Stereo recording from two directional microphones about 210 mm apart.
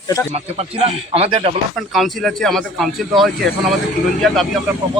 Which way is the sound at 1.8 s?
Centre (ahead or behind).